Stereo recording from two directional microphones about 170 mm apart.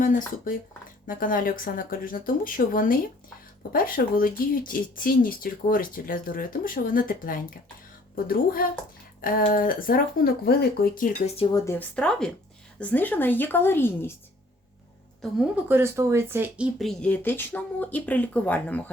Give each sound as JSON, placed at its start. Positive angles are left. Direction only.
{"t": 0.0, "sound": "speech", "side_deg": 50}
{"t": 11.5, "sound": "speech", "side_deg": 15}
{"t": 15.7, "sound": "speech", "side_deg": -15}
{"t": 16.7, "sound": "speech", "side_deg": 0}